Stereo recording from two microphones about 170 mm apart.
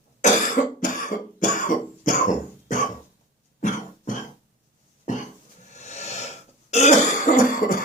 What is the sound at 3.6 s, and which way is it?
Cough, 45° left (ahead or behind).